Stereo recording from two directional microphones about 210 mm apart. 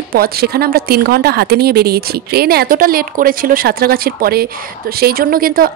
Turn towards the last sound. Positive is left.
turn(degrees=-45)  # may be behind; listen again after turning